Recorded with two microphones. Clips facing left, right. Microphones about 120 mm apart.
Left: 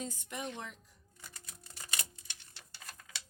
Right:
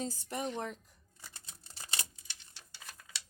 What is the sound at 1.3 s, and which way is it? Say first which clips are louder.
Typewriter: left 2 dB; 25° right (ahead or behind).